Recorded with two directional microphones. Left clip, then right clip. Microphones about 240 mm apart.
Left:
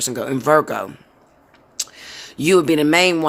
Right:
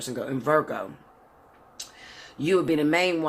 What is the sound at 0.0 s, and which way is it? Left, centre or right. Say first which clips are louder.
Speech: left 8 dB; left.